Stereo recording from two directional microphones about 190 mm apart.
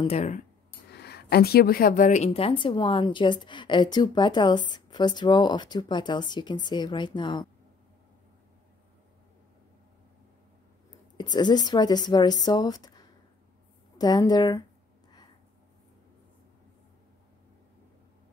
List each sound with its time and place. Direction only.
0.0 s a sound: 35° left (ahead or behind)
0.9 s speech: 55° left (ahead or behind); by 7.4 s 25° left (ahead or behind)
11.1 s speech: 20° left (ahead or behind)